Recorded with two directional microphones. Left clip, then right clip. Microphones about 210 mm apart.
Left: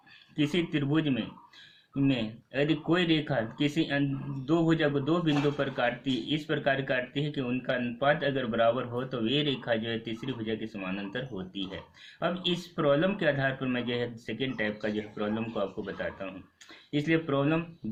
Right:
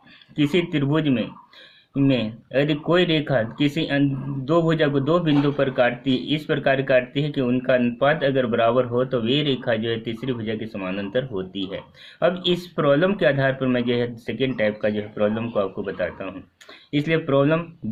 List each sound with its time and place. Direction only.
0.3 s speech: 45° right (ahead or behind)